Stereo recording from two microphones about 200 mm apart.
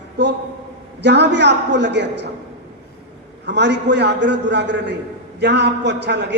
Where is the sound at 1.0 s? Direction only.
60° right (ahead or behind).